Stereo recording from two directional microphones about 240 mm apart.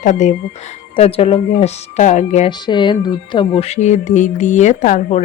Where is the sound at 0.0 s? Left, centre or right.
Left.